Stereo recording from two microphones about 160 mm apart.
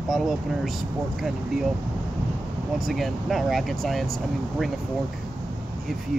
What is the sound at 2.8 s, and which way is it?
Speech, centre (ahead or behind).